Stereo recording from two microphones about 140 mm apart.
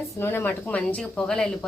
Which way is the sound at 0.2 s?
15° left (ahead or behind).